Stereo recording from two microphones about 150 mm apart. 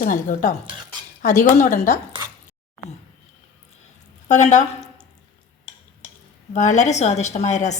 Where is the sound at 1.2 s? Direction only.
55° left (ahead or behind).